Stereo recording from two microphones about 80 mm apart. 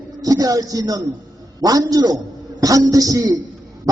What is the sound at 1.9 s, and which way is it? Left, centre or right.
Music, right.